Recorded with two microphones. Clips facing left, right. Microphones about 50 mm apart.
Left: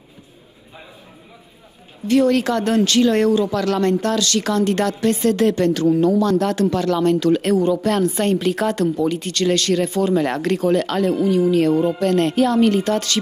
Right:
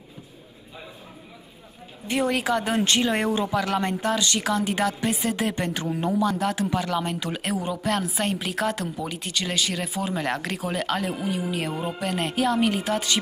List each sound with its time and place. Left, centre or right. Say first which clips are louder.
2.0 s a woman's voice: left 8 dB; centre
2.8 s a woman's voice: left 7 dB; right
6.2 s a woman's voice: left 7 dB; centre